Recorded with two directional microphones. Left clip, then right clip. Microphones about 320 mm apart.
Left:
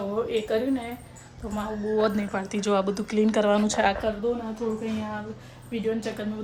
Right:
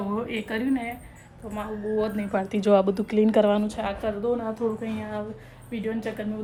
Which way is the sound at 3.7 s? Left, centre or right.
Left.